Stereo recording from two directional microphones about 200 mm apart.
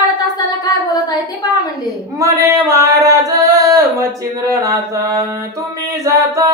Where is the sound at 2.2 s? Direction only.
15° right (ahead or behind).